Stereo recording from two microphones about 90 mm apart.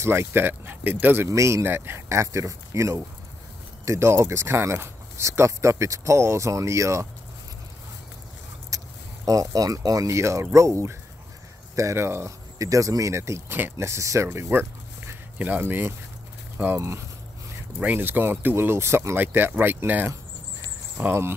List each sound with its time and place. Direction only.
0.0 s speech: 25° right (ahead or behind)
1.3 s speech: 35° right (ahead or behind)
8.6 s speech: 40° right (ahead or behind)